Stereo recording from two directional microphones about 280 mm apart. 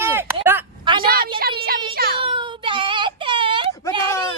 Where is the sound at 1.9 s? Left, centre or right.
Right.